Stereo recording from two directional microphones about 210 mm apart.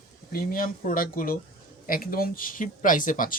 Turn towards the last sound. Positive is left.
turn(degrees=40)  # may be behind; listen again after turning